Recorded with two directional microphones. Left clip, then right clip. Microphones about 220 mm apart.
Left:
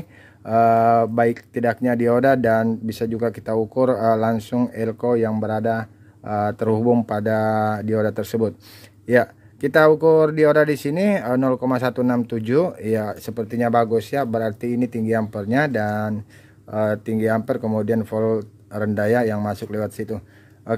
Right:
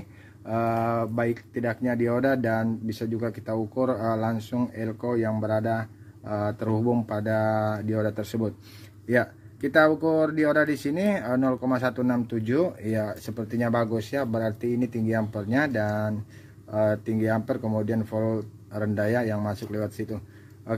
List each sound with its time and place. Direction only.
0.5 s speech: 50° left (ahead or behind)